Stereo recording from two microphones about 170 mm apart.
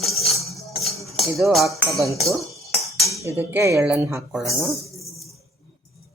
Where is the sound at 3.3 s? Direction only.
15° right (ahead or behind).